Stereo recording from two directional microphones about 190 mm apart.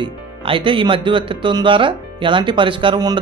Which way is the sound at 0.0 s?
25° right (ahead or behind).